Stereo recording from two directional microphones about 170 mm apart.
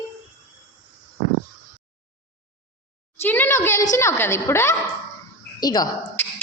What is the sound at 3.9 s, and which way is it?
Speech, 15° left (ahead or behind).